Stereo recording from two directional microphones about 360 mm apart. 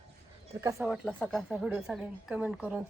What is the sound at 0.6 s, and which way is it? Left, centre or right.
A woman's voice, centre.